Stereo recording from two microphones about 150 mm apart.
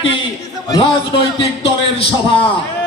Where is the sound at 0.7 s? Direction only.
35° left (ahead or behind).